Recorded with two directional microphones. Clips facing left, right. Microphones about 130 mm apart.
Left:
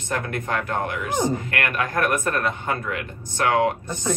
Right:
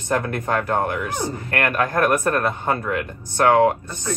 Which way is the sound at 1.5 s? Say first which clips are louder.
Right 4 dB; 45° right (ahead or behind).